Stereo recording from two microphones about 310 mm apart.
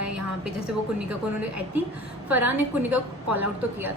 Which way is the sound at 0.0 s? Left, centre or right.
Right.